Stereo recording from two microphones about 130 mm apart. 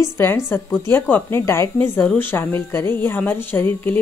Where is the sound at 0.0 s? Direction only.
15° left (ahead or behind).